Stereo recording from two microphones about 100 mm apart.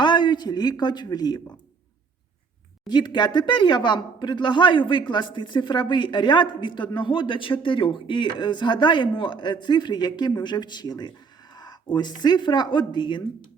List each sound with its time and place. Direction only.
0.0 s speech: 50° left (ahead or behind)
2.8 s speech: 50° left (ahead or behind)